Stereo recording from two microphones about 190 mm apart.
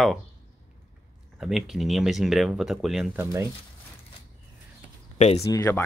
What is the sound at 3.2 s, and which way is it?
Speech, 15° right (ahead or behind).